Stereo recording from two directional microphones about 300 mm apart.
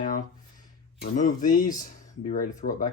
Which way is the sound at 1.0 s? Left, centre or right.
Left.